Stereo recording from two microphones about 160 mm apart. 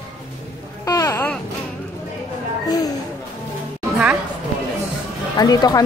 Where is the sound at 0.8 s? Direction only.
20° left (ahead or behind).